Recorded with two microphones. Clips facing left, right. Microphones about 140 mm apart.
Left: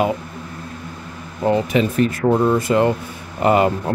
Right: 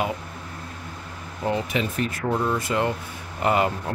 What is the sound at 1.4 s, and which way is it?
Speech, 45° left (ahead or behind).